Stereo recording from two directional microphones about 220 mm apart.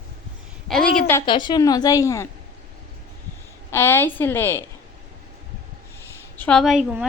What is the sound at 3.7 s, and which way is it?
Speech, 10° left (ahead or behind).